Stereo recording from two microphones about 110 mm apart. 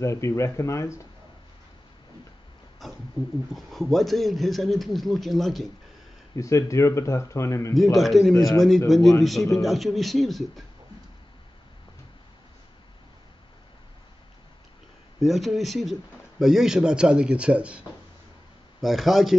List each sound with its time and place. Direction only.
0.0 s speech: 25° left (ahead or behind)
2.8 s a man's voice: centre (ahead or behind)
6.3 s speech: 30° left (ahead or behind)
7.7 s a man's voice: centre (ahead or behind)
15.1 s a man's voice: centre (ahead or behind)